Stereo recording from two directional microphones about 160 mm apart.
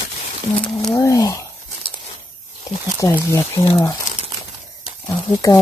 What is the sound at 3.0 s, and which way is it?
Speech, 20° left (ahead or behind).